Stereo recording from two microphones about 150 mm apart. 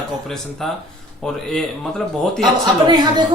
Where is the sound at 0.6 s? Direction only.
Centre (ahead or behind).